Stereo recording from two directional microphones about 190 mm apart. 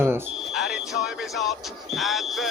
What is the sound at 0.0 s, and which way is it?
Smoke detector, 10° right (ahead or behind).